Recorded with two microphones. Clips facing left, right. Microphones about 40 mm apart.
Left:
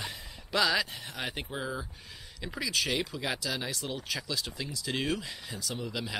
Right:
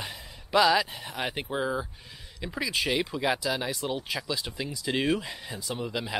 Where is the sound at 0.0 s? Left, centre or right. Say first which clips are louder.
Right 1 dB; centre.